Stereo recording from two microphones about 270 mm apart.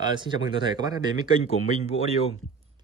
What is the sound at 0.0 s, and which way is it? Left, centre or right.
Speech, centre.